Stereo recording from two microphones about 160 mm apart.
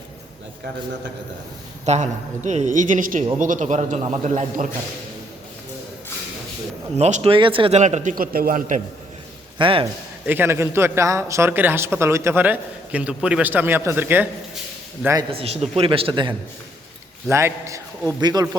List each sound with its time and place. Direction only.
1.8 s a woman's voice: 45° right (ahead or behind)
6.9 s speech: 40° right (ahead or behind)
7.8 s a man's voice: 50° right (ahead or behind)
9.6 s a man's voice: 35° right (ahead or behind)
10.2 s a man's voice: 15° right (ahead or behind)
15.3 s speech: 40° right (ahead or behind)
17.2 s a man's voice: 15° right (ahead or behind)